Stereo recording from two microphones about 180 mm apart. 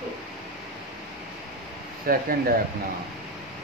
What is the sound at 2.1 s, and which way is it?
Speech, 55° right (ahead or behind).